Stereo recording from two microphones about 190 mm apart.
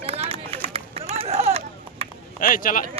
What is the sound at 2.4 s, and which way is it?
Speech, 45° left (ahead or behind).